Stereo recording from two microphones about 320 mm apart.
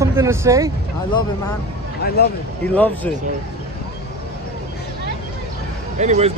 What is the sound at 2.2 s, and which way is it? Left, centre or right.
Speech, left.